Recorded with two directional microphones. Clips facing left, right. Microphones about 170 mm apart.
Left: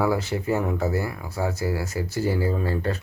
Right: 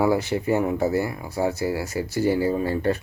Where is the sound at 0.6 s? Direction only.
15° right (ahead or behind).